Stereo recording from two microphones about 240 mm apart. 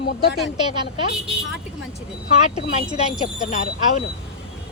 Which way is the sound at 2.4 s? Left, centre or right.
Left.